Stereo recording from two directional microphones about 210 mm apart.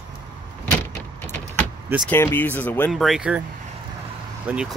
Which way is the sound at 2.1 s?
10° left (ahead or behind).